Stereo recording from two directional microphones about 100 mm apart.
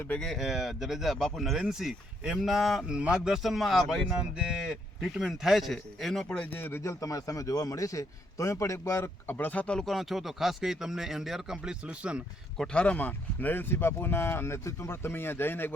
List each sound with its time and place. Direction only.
0.1 s speech: 5° left (ahead or behind); by 6.9 s 20° left (ahead or behind)
7.0 s a man's voice: 35° left (ahead or behind); by 12.2 s 10° right (ahead or behind)
12.5 s speech: 10° left (ahead or behind)